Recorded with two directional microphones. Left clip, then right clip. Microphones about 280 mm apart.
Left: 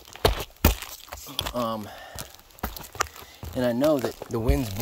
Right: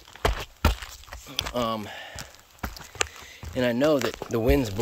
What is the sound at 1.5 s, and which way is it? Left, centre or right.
Speech, centre.